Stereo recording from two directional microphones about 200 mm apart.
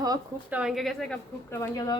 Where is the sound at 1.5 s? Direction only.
15° left (ahead or behind).